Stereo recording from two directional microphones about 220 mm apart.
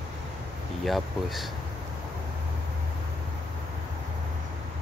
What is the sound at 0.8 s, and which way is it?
Speech, centre (ahead or behind).